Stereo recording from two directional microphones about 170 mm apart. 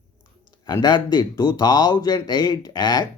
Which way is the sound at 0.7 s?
25° left (ahead or behind).